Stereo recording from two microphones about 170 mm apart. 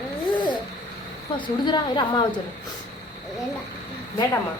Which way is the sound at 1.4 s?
25° left (ahead or behind).